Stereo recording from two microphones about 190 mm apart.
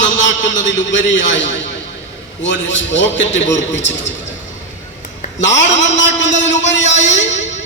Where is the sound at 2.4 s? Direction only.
70° left (ahead or behind).